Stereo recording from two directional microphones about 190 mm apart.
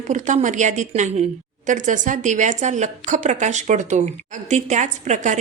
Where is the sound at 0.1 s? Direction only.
40° right (ahead or behind).